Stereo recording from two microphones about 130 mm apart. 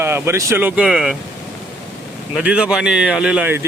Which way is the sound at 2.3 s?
5° right (ahead or behind).